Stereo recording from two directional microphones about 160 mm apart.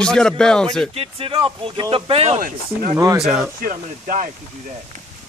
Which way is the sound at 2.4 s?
60° right (ahead or behind).